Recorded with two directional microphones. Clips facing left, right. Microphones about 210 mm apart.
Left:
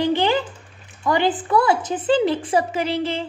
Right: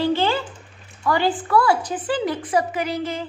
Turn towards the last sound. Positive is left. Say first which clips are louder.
# left 2 dB
turn(degrees=30)  # may be behind; listen again after turning